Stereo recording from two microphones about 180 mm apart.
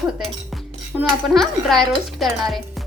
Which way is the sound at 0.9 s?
5° right (ahead or behind).